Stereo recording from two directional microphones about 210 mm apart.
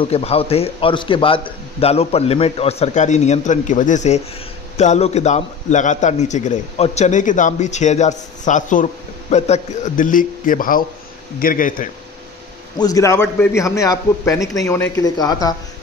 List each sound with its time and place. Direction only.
0.0 s a man's voice: 30° left (ahead or behind)
12.7 s a man's voice: 15° left (ahead or behind)